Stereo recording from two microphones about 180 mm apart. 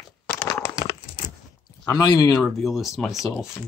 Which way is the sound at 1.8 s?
20° left (ahead or behind).